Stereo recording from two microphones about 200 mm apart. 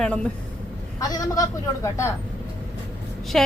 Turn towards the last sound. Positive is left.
turn(degrees=0)  # may be behind; listen again after turning